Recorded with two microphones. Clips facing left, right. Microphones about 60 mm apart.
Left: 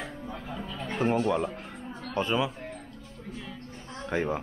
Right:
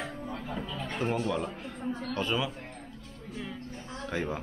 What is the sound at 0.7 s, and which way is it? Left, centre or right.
Speech, left.